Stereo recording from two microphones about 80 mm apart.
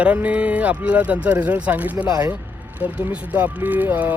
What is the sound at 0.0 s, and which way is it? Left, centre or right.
Speech, centre.